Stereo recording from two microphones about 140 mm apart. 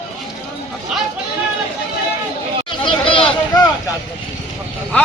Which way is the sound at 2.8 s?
35° left (ahead or behind).